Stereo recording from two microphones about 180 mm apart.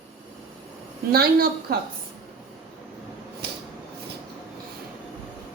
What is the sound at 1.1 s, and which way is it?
Speech, 60° right (ahead or behind).